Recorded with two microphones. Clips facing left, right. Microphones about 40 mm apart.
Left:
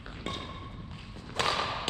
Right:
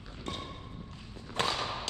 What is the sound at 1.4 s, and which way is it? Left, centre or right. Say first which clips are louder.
Thump: left 2 dB; centre.